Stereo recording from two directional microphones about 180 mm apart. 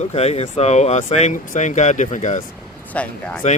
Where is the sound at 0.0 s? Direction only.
35° left (ahead or behind).